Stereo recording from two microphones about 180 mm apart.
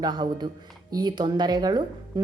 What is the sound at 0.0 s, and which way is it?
Speech, 25° right (ahead or behind).